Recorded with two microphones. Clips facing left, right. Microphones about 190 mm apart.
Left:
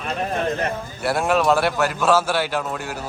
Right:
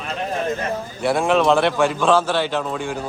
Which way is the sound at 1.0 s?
5° left (ahead or behind).